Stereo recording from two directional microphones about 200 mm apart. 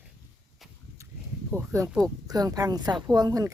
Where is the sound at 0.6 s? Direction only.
Centre (ahead or behind).